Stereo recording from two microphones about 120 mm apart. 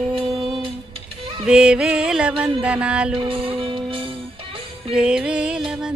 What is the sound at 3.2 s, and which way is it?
Music, 50° right (ahead or behind).